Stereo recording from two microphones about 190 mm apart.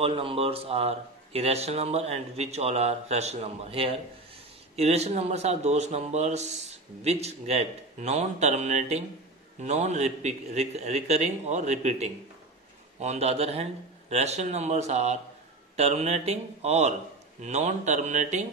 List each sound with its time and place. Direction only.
0.0 s speech: 30° right (ahead or behind)